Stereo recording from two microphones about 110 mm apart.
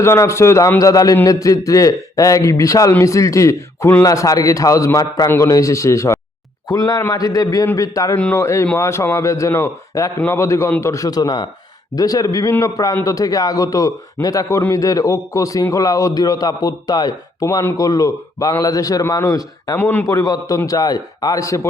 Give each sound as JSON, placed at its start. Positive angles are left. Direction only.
{"t": 0.0, "sound": "a man's voice", "side_deg": 25}
{"t": 8.1, "sound": "a man's voice", "side_deg": 20}
{"t": 17.4, "sound": "a man's voice", "side_deg": 25}
{"t": 19.7, "sound": "a man's voice", "side_deg": 20}
{"t": 20.1, "sound": "a man's voice", "side_deg": 30}